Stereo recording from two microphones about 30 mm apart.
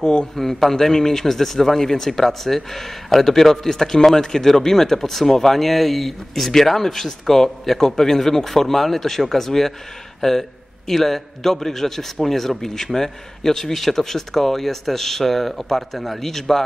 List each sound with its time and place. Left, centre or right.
0.0 s a man's voice: left
0.4 s a man's voice: centre